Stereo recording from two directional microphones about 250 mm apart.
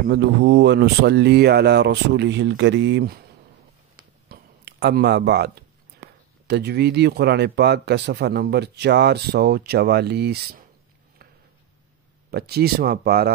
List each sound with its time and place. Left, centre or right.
0.1 s speech: right
4.3 s a sound: right
6.4 s speech: right
12.3 s speech: right